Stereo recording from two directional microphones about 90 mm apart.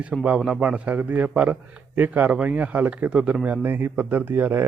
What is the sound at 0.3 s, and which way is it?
Speech, 10° right (ahead or behind).